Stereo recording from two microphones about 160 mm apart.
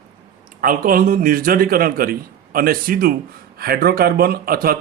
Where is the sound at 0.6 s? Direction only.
60° right (ahead or behind).